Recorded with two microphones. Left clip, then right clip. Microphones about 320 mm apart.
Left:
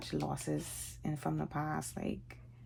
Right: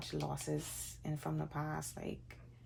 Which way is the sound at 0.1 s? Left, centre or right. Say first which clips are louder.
Left 3 dB; left.